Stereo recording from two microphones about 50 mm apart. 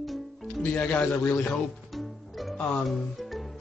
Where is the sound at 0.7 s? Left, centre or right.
Centre.